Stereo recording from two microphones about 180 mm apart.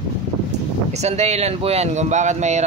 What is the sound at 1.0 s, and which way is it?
Speech, 35° right (ahead or behind).